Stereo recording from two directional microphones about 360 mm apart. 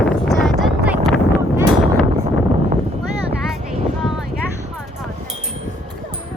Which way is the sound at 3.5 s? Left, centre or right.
Centre.